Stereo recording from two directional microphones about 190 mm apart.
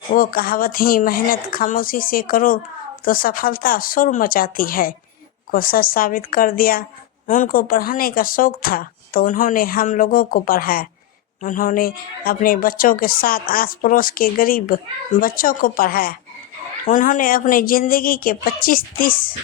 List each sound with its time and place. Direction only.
0.1 s a woman's voice: 50° left (ahead or behind)